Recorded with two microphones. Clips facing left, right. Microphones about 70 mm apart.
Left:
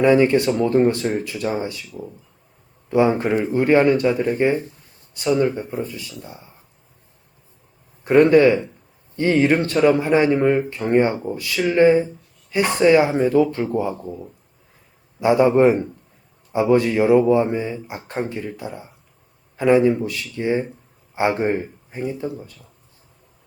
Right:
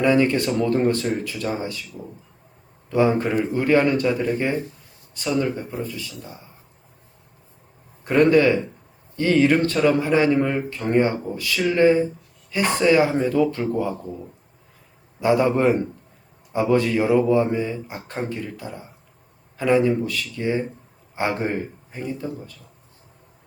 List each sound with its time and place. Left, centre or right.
0.0 s speech: centre
2.0 s speech: centre
2.9 s speech: centre
5.4 s speech: centre
8.0 s speech: centre
11.5 s speech: centre
11.8 s speech: centre